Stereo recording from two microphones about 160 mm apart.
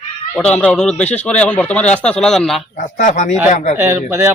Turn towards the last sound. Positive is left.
turn(degrees=-15)  # may be behind; listen again after turning